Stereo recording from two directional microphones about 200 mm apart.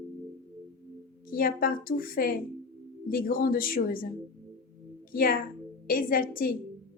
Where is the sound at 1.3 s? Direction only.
45° left (ahead or behind).